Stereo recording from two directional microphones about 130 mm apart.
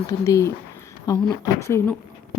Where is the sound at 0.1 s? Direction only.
20° left (ahead or behind).